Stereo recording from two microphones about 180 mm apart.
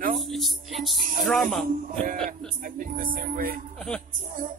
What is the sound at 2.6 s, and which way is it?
Speech, 50° right (ahead or behind).